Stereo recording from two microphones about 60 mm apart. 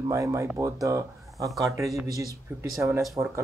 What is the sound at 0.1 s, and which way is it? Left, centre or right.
Speech, right.